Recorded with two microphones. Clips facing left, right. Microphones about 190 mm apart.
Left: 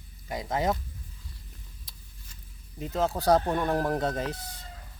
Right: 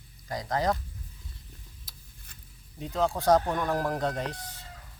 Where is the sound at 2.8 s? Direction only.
5° left (ahead or behind).